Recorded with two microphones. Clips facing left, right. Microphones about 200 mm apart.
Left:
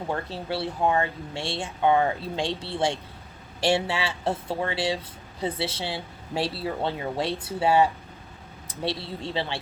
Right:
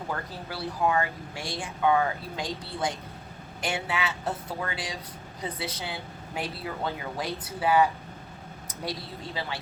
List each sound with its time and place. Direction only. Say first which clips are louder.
0.1 s speech: left 7 dB; 30° left (ahead or behind)